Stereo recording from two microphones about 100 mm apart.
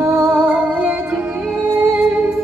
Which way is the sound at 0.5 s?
20° right (ahead or behind).